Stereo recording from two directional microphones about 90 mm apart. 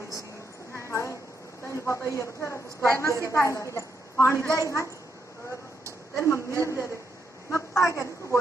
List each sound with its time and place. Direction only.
0.8 s a sound: 30° left (ahead or behind)
1.6 s a woman's voice: 30° left (ahead or behind)
6.1 s a woman's voice: 30° left (ahead or behind)